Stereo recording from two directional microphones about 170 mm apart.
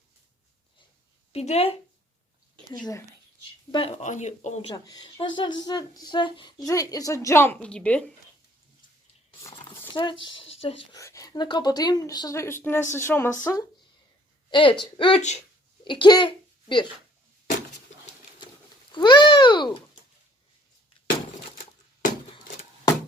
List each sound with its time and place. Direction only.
1.3 s speech: 35° left (ahead or behind)
2.7 s speech: 25° left (ahead or behind)
4.0 s speech: 45° left (ahead or behind)
4.7 s speech: 25° left (ahead or behind); by 8.0 s 5° left (ahead or behind)
9.9 s speech: 30° left (ahead or behind)
10.9 s speech: 20° left (ahead or behind)
14.5 s a child's voice: 30° left (ahead or behind)
18.9 s babbling: 25° left (ahead or behind)